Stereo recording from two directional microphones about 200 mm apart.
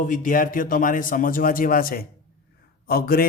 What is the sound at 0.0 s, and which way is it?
A man's voice, 40° left (ahead or behind).